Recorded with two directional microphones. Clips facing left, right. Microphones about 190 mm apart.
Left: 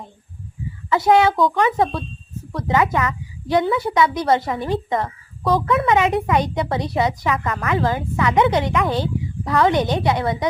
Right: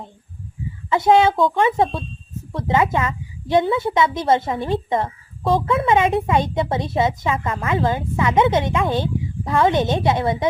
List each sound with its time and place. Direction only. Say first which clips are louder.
0.9 s a woman's voice: even; 25° right (ahead or behind)